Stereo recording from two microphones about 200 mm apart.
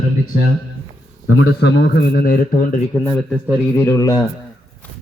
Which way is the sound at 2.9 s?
5° left (ahead or behind).